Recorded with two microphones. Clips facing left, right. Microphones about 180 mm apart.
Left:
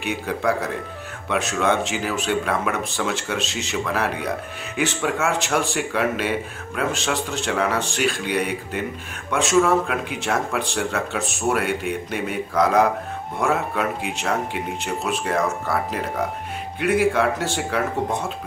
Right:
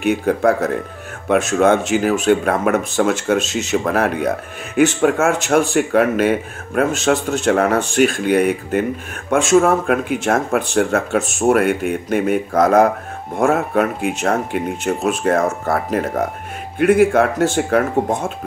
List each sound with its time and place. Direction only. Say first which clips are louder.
0.0 s speech: right 8 dB; 50° right (ahead or behind)